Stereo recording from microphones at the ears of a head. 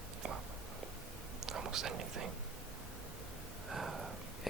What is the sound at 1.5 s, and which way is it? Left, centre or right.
Speech, right.